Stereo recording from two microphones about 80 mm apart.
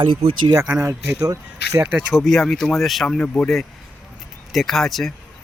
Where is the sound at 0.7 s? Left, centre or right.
Right.